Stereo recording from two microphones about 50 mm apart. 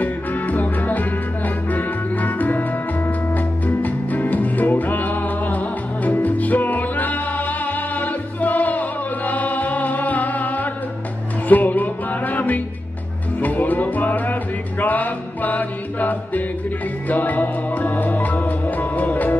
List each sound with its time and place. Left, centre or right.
0.0 s music: left